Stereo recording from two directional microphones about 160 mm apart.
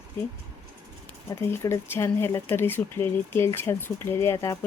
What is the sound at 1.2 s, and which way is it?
Speech, 20° left (ahead or behind).